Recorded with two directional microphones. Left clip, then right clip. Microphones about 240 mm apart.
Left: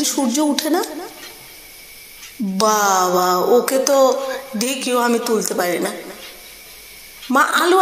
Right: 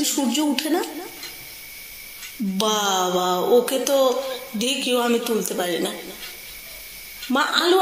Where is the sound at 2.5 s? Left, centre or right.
Centre.